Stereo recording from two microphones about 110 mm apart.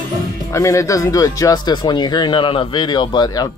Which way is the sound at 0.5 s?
30° left (ahead or behind).